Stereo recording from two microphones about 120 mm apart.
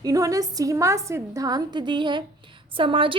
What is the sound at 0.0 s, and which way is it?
A woman's voice, 30° right (ahead or behind).